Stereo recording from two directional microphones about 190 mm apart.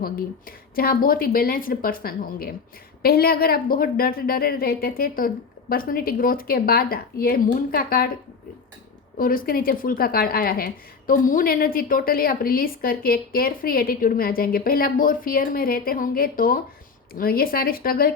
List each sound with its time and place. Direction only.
0.0 s speech: 50° left (ahead or behind)
9.1 s speech: 50° left (ahead or behind)